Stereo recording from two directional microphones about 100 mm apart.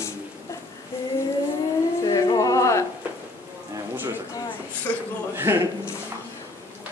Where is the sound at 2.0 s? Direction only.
40° left (ahead or behind).